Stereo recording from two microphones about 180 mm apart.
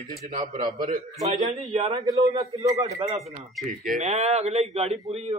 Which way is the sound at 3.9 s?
40° right (ahead or behind).